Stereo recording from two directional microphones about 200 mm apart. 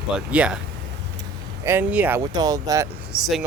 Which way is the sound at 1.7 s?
10° right (ahead or behind).